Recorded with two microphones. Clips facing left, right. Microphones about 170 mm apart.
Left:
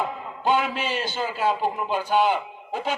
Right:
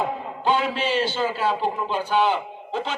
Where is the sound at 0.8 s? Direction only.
15° left (ahead or behind).